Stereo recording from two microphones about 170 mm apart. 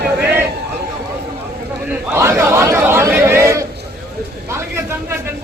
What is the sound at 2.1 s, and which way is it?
Chatter, 15° right (ahead or behind).